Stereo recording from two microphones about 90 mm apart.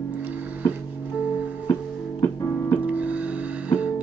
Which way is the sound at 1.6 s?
40° left (ahead or behind).